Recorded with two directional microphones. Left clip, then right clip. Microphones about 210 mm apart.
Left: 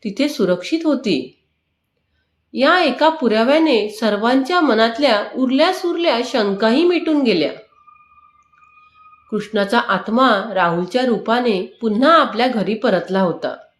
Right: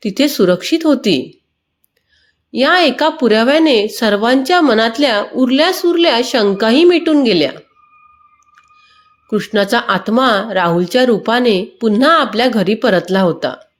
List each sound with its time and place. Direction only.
0.0 s a woman's voice: 40° right (ahead or behind)
2.5 s a woman's voice: 40° right (ahead or behind)
9.3 s a woman's voice: 40° right (ahead or behind)